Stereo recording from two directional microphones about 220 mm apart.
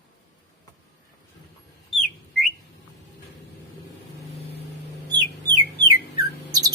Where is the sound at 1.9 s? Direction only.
Centre (ahead or behind).